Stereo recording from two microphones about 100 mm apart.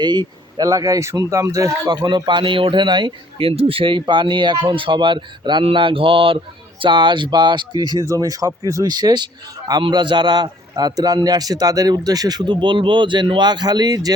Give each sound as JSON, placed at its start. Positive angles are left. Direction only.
{"t": 0.0, "sound": "speech", "side_deg": -50}
{"t": 1.9, "sound": "a man's voice", "side_deg": -45}